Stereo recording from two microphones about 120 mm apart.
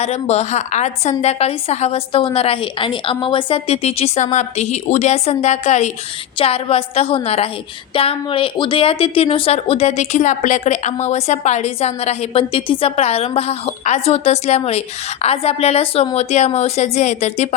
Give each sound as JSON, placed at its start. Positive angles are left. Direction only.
{"t": 0.0, "sound": "a woman's voice", "side_deg": 60}
{"t": 1.2, "sound": "speech", "side_deg": 60}
{"t": 6.4, "sound": "a woman's voice", "side_deg": 55}